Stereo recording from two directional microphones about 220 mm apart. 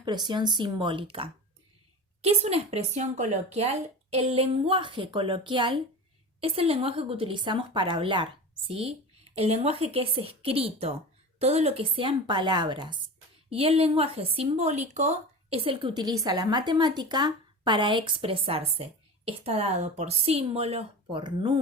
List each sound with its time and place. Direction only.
0.0 s a woman's voice: 20° right (ahead or behind)